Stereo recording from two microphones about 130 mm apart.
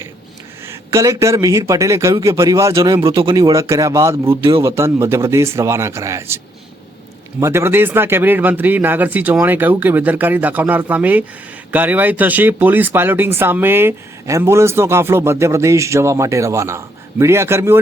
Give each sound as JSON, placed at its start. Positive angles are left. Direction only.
{"t": 0.6, "sound": "a man's voice", "side_deg": -20}